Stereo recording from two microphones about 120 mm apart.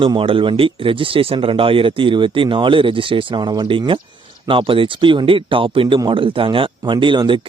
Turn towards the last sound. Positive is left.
turn(degrees=-40)  # may be behind; listen again after turning